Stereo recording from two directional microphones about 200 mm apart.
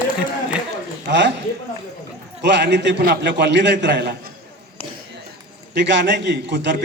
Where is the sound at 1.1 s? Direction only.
60° right (ahead or behind).